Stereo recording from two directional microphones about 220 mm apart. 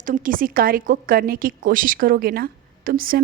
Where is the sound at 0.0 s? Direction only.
40° right (ahead or behind).